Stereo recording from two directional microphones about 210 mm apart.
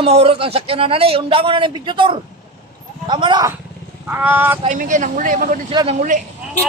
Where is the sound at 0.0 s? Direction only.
30° right (ahead or behind).